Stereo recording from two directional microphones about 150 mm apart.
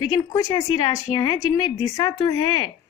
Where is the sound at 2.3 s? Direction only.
35° left (ahead or behind).